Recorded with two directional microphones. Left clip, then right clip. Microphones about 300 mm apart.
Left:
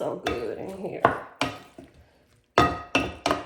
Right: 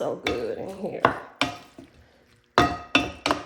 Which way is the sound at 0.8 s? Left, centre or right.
Right.